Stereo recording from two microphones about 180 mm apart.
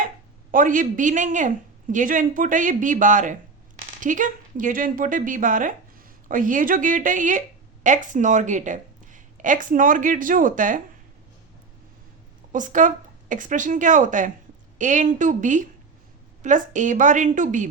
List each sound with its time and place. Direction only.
0.5 s a woman's voice: 50° right (ahead or behind)
12.5 s speech: 45° right (ahead or behind)